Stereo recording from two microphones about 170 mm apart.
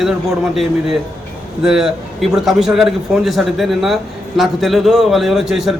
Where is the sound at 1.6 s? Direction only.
Centre (ahead or behind).